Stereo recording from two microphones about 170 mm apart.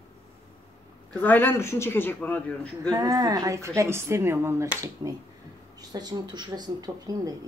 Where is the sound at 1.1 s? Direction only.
10° left (ahead or behind).